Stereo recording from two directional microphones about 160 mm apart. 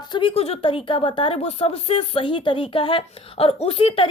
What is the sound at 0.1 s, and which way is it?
A woman's voice, 35° left (ahead or behind).